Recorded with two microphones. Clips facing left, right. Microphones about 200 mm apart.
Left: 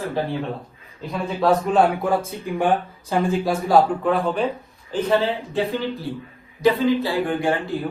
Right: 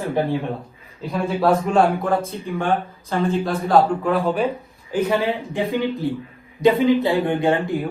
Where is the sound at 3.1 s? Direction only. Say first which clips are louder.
Left 1 dB; 10° left (ahead or behind).